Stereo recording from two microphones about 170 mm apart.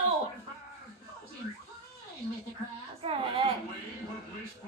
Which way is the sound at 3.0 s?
35° right (ahead or behind).